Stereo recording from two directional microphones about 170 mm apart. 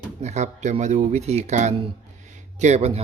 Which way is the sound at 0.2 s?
40° right (ahead or behind).